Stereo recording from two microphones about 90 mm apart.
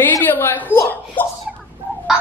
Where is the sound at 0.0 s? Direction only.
20° left (ahead or behind).